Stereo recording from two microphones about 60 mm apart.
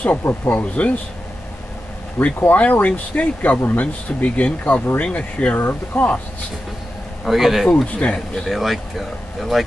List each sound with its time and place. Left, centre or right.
0.3 s speech: left
2.4 s speech: left
5.6 s speech: left
7.2 s speech: centre
7.7 s speech: left
8.5 s speech: centre